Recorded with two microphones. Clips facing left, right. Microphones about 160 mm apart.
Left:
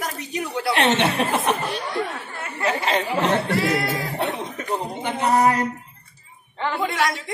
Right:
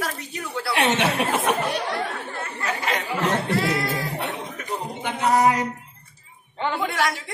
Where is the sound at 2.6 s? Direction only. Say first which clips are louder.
Left 5 dB; 30° left (ahead or behind).